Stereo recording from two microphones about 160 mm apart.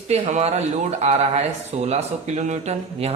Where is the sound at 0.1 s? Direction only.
45° right (ahead or behind).